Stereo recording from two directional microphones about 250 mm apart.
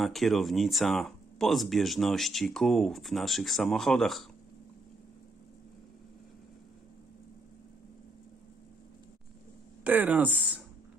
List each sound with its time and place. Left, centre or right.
0.0 s speech: centre
9.8 s speech: centre